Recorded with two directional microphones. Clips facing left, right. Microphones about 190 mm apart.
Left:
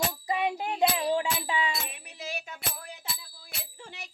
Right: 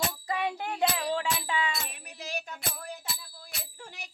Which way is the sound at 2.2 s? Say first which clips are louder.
Even; 10° left (ahead or behind).